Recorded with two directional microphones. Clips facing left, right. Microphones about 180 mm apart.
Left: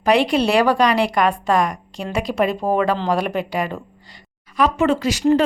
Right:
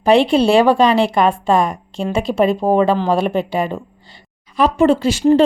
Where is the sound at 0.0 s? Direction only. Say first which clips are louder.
Right 4 dB; 25° right (ahead or behind).